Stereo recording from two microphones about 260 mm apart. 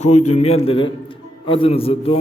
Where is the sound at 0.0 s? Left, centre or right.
Left.